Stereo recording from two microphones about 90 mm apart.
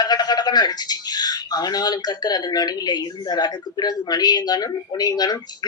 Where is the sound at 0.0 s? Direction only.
50° left (ahead or behind).